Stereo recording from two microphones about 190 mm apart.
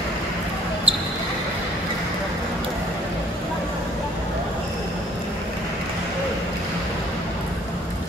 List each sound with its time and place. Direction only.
0.9 s basketball bounce: 30° right (ahead or behind)